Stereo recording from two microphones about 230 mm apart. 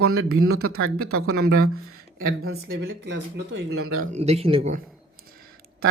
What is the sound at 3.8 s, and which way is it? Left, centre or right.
Speech, right.